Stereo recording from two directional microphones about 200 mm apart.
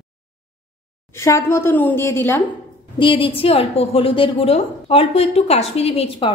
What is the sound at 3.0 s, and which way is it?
A woman's voice, 25° left (ahead or behind).